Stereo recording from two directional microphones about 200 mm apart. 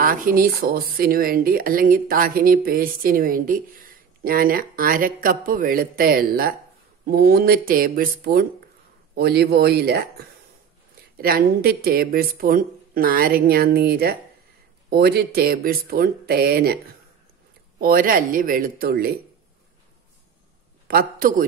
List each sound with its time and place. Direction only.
0.0 s speech: 45° right (ahead or behind)
20.8 s a man's voice: 45° right (ahead or behind)